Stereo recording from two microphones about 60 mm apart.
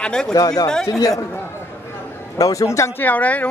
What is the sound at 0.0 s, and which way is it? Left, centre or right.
Speech, centre.